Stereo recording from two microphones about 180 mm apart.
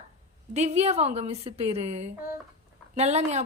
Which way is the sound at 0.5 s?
40° right (ahead or behind).